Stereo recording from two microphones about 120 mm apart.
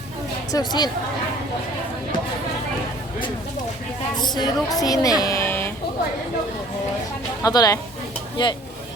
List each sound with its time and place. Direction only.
0.5 s a woman's voice: 35° left (ahead or behind)
4.2 s a woman's voice: 35° left (ahead or behind)
5.2 s a sound: 25° left (ahead or behind)
7.4 s a woman's voice: 30° left (ahead or behind)
8.4 s a woman's voice: 40° left (ahead or behind)